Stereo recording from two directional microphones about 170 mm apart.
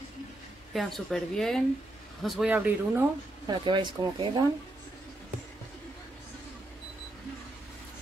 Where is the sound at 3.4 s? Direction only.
25° right (ahead or behind).